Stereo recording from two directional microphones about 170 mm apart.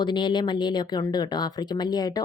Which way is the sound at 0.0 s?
30° left (ahead or behind).